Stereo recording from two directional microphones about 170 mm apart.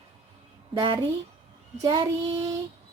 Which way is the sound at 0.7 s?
25° right (ahead or behind).